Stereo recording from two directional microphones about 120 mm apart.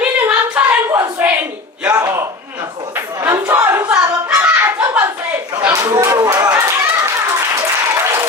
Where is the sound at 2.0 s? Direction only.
25° right (ahead or behind).